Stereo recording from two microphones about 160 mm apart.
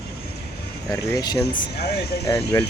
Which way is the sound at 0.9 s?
25° left (ahead or behind).